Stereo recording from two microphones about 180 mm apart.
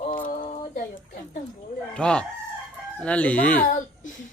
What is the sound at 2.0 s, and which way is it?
Speech, 5° left (ahead or behind).